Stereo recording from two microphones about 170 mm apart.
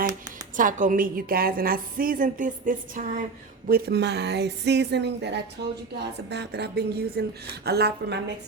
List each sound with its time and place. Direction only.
0.5 s a woman's voice: 50° right (ahead or behind)
3.7 s a woman's voice: 65° right (ahead or behind)